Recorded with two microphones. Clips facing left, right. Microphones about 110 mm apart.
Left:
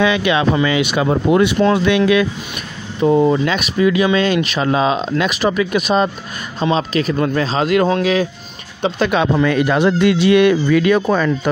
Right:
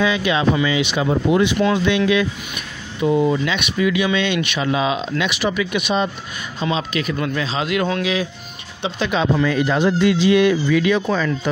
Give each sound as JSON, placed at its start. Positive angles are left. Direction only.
{"t": 0.0, "sound": "speech", "side_deg": 65}
{"t": 0.6, "sound": "speech", "side_deg": 55}
{"t": 3.0, "sound": "speech", "side_deg": 40}